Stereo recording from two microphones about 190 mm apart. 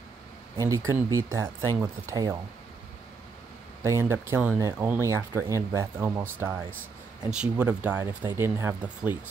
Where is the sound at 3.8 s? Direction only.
15° right (ahead or behind).